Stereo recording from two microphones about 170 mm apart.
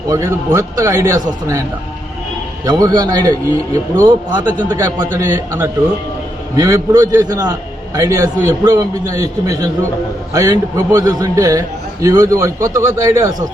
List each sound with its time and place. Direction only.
0.1 s a man's voice: 20° right (ahead or behind)
2.6 s a man's voice: 20° right (ahead or behind)